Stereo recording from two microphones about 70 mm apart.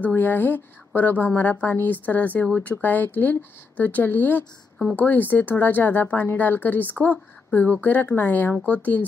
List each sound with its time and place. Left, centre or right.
0.0 s speech: left